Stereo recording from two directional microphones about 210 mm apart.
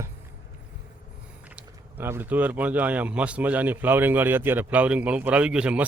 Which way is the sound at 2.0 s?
10° right (ahead or behind).